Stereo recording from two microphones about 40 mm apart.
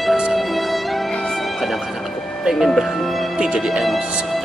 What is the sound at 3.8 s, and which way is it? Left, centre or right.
Speech, centre.